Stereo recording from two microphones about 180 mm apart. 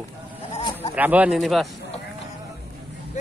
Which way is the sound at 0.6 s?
25° left (ahead or behind).